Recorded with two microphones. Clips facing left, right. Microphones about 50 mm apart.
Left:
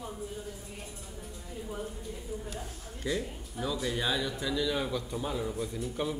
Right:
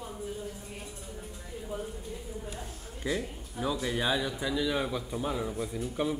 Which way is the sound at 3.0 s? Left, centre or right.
Centre.